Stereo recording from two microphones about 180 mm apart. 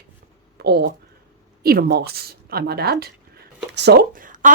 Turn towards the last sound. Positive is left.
turn(degrees=-45)  # may be behind; listen again after turning